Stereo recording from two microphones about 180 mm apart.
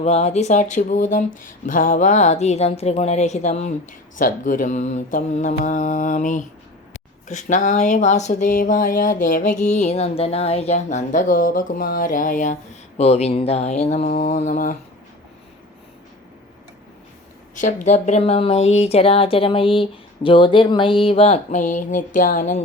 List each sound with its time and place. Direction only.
0.0 s speech: 35° left (ahead or behind)
13.0 s speech: 35° left (ahead or behind)
17.5 s speech: 45° left (ahead or behind)